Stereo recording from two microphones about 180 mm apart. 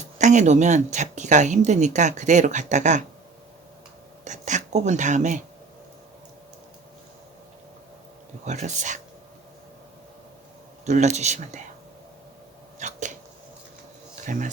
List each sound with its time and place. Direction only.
0.2 s speech: 40° right (ahead or behind)
4.2 s speech: 40° right (ahead or behind)
8.4 s speech: 40° right (ahead or behind)
10.8 s speech: 40° right (ahead or behind)
12.8 s a sound: 45° right (ahead or behind)
14.3 s speech: 45° right (ahead or behind)